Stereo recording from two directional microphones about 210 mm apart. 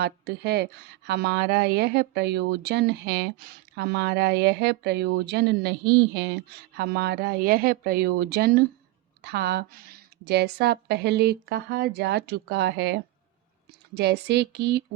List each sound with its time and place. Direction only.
0.0 s speech: 50° right (ahead or behind)